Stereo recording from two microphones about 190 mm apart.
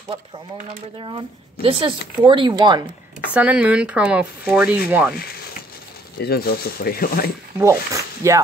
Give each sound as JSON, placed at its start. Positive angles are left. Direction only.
{"t": 0.9, "sound": "speech", "side_deg": -25}
{"t": 3.3, "sound": "speech", "side_deg": -5}
{"t": 6.1, "sound": "speech", "side_deg": 55}
{"t": 7.5, "sound": "speech", "side_deg": -15}